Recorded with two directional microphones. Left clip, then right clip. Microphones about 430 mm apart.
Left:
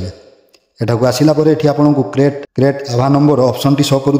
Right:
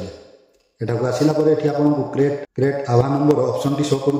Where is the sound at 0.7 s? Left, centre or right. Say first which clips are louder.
Left 7 dB; left.